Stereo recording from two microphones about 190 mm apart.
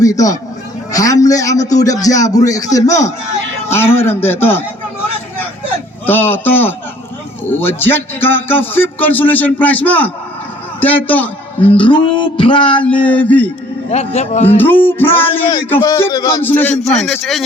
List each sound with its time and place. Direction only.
0.0 s speech: 20° left (ahead or behind)
6.1 s speech: 10° left (ahead or behind)
7.8 s speech: 10° left (ahead or behind)
11.6 s a sound: 30° left (ahead or behind)
12.8 s speech: 5° left (ahead or behind)
13.9 s a man's voice: 35° left (ahead or behind)
14.5 s speech: 10° left (ahead or behind)